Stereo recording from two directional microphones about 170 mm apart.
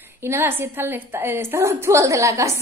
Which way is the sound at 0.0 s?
15° right (ahead or behind).